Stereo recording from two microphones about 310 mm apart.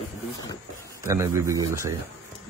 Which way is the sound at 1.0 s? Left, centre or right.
Centre.